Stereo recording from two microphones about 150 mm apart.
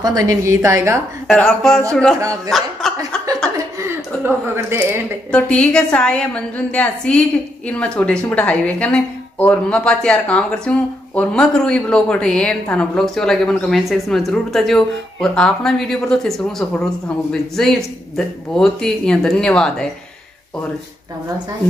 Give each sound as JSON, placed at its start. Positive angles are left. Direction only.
{"t": 0.0, "sound": "a woman's voice", "side_deg": -25}
{"t": 1.2, "sound": "a woman's voice", "side_deg": 0}
{"t": 2.1, "sound": "a woman's voice", "side_deg": -20}
{"t": 2.8, "sound": "chuckle", "side_deg": 0}
{"t": 3.5, "sound": "chuckle", "side_deg": -15}
{"t": 5.3, "sound": "a woman's voice", "side_deg": 5}